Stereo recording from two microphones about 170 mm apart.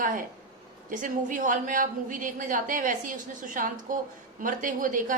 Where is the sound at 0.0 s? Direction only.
50° right (ahead or behind).